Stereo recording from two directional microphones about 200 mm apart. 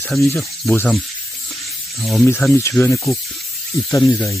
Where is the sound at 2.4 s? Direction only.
10° left (ahead or behind).